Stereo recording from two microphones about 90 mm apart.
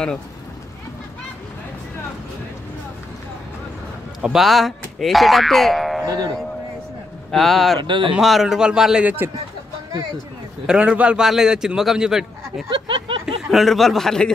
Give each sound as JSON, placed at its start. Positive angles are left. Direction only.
{"t": 4.2, "sound": "speech", "side_deg": -5}
{"t": 6.0, "sound": "speech", "side_deg": -40}
{"t": 7.2, "sound": "a man's voice", "side_deg": 0}
{"t": 7.8, "sound": "speech", "side_deg": -65}
{"t": 8.2, "sound": "a man's voice", "side_deg": 0}
{"t": 10.7, "sound": "a man's voice", "side_deg": -10}
{"t": 12.6, "sound": "a sound", "side_deg": -65}
{"t": 13.2, "sound": "speech", "side_deg": -5}